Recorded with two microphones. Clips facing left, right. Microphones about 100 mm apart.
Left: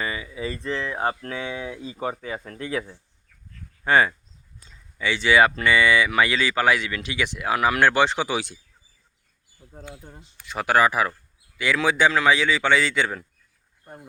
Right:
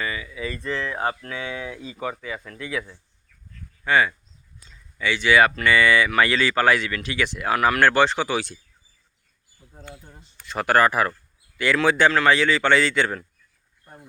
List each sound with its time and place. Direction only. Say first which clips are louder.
0.0 s speech: even; 25° left (ahead or behind)
1.2 s speech: left 1 dB; 30° left (ahead or behind)
4.7 s speech: right 1 dB; 20° left (ahead or behind)
9.7 s speech: left 2 dB; 5° left (ahead or behind)